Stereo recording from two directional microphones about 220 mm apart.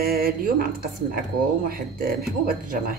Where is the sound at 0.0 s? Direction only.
45° right (ahead or behind).